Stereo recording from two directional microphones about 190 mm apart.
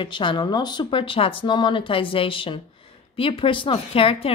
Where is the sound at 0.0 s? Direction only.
25° left (ahead or behind).